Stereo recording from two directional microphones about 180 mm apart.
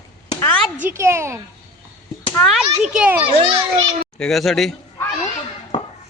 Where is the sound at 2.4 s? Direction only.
Centre (ahead or behind).